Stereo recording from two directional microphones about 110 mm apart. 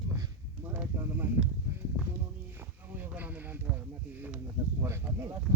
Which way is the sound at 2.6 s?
15° right (ahead or behind).